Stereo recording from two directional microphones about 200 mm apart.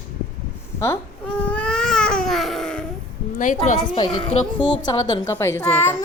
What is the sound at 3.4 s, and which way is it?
Speech, 40° left (ahead or behind).